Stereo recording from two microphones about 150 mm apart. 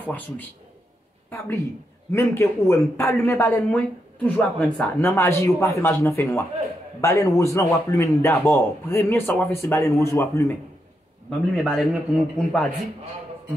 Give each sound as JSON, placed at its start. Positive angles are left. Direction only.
{"t": 0.0, "sound": "a man's voice", "side_deg": 10}
{"t": 2.1, "sound": "a man's voice", "side_deg": 20}
{"t": 11.2, "sound": "a man's voice", "side_deg": 5}